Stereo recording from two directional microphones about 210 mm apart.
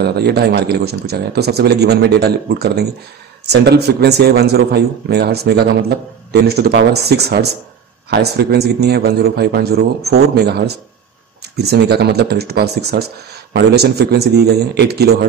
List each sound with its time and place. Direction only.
0.0 s a man's voice: 50° right (ahead or behind)